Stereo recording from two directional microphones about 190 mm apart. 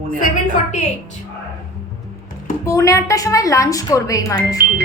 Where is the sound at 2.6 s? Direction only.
15° left (ahead or behind).